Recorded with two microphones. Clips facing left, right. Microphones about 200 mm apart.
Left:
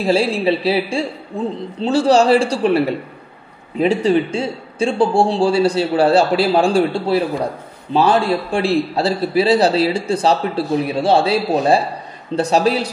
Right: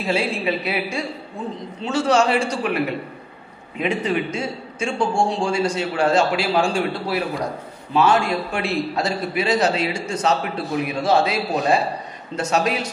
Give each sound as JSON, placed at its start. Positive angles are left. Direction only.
{"t": 0.0, "sound": "a man's voice", "side_deg": 35}